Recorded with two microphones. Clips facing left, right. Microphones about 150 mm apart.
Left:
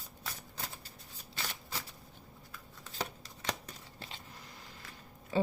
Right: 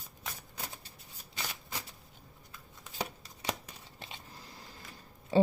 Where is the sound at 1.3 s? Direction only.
15° right (ahead or behind).